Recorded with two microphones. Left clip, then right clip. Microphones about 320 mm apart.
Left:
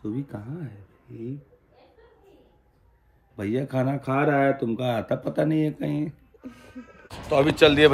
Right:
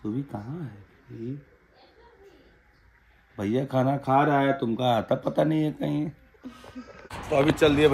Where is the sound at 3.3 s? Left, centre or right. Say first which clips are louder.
Right 1 dB; centre.